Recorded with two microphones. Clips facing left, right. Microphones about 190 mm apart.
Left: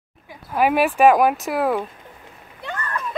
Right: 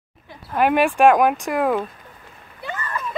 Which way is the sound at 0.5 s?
5° left (ahead or behind).